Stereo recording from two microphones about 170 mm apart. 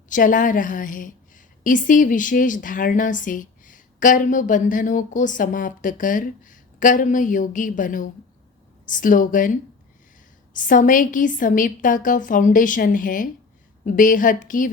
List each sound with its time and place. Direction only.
0.1 s a woman's voice: 50° left (ahead or behind)